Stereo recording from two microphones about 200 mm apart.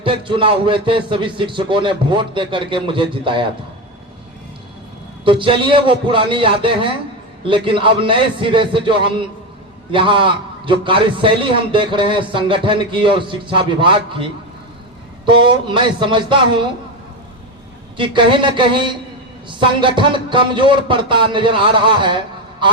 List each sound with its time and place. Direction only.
0.0 s a man's voice: 25° right (ahead or behind)
5.2 s a man's voice: 25° right (ahead or behind)
15.3 s a man's voice: 25° right (ahead or behind)
17.9 s a man's voice: 25° right (ahead or behind)